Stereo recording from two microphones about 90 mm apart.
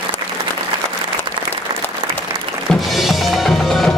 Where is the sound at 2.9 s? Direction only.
Centre (ahead or behind).